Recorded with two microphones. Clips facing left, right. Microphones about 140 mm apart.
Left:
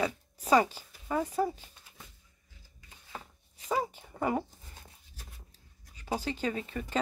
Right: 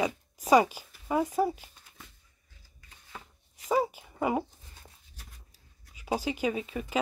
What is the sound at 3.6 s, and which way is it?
Speech, 10° right (ahead or behind).